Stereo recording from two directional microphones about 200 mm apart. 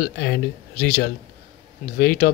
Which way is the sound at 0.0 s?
55° left (ahead or behind).